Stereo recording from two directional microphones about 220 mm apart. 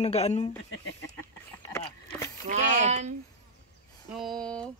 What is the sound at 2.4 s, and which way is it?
Speech, 30° right (ahead or behind).